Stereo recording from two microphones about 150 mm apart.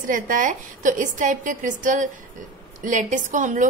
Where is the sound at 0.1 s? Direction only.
60° right (ahead or behind).